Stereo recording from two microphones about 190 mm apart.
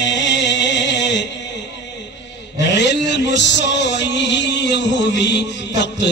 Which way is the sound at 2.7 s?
65° left (ahead or behind).